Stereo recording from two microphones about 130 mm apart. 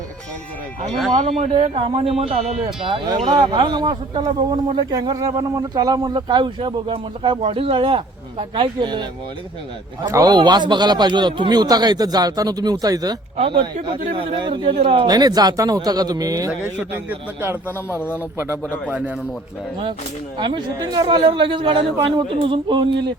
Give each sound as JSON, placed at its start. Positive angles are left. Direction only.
{"t": 1.1, "sound": "speech", "side_deg": -55}
{"t": 13.3, "sound": "speech", "side_deg": -50}
{"t": 14.2, "sound": "speech", "side_deg": -35}
{"t": 15.0, "sound": "speech", "side_deg": -30}
{"t": 16.7, "sound": "a man's voice", "side_deg": -15}
{"t": 17.8, "sound": "speech", "side_deg": 20}
{"t": 18.3, "sound": "a man's voice", "side_deg": -20}
{"t": 20.4, "sound": "speech", "side_deg": -35}